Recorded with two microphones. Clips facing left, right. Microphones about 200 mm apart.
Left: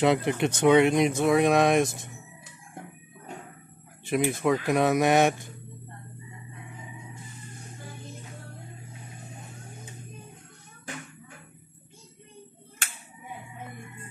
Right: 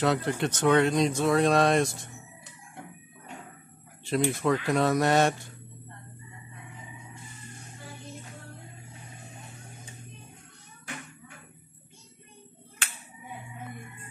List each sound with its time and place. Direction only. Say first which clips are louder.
0.0 s speech: left 3 dB; 15° left (ahead or behind)
4.1 s speech: left 1 dB; 15° left (ahead or behind)